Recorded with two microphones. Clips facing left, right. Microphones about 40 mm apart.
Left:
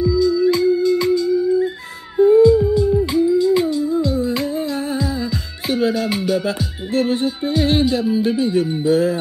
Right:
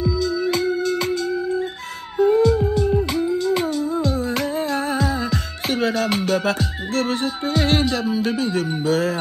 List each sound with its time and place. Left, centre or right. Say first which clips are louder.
0.2 s music: left 8 dB; right
2.9 s music: left 3 dB; right
3.3 s music: left 5 dB; right
6.9 s music: left 5 dB; right
8.2 s speech: left 4 dB; centre
8.8 s music: left 3 dB; right